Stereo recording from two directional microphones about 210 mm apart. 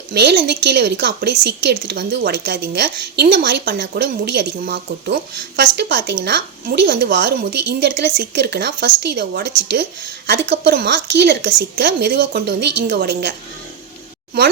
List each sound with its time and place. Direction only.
0.1 s a woman's voice: 50° right (ahead or behind)